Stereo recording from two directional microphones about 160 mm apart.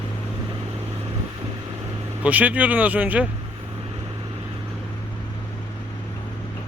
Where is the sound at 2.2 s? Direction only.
10° right (ahead or behind).